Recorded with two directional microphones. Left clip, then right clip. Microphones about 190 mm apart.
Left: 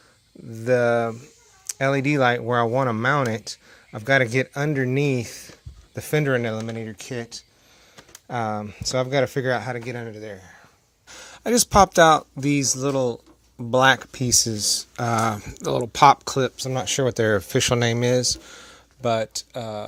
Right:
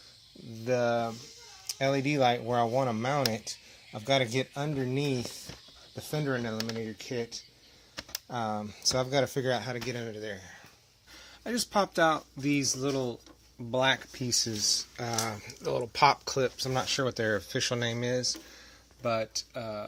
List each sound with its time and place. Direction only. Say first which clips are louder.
0.6 s speech: left 9 dB; 50° left (ahead or behind); by 3.1 s 35° left (ahead or behind)
3.9 s speech: left 8 dB; 50° left (ahead or behind)
4.7 s speech: left 9 dB; 40° left (ahead or behind); by 6.7 s 80° left
6.8 s speech: left 3 dB; 55° left (ahead or behind)
8.9 s speech: left 6 dB; 25° left (ahead or behind)
9.4 s speech: left 7 dB; 40° left (ahead or behind)
11.1 s speech: left 13 dB; 60° left (ahead or behind)
16.6 s speech: left 4 dB; 30° left (ahead or behind)
16.8 s speech: left 11 dB; 50° left (ahead or behind)